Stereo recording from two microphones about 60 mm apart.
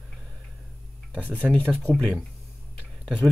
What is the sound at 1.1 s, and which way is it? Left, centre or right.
Speech, left.